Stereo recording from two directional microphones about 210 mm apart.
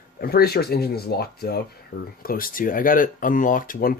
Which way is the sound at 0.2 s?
45° left (ahead or behind).